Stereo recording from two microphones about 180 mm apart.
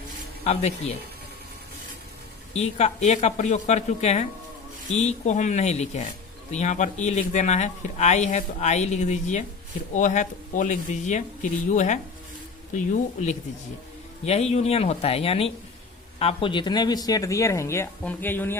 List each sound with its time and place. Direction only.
0.4 s speech: 35° left (ahead or behind)
2.5 s speech: 40° left (ahead or behind); by 18.5 s 10° left (ahead or behind)